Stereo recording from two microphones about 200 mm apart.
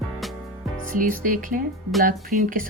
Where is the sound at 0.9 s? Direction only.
45° right (ahead or behind).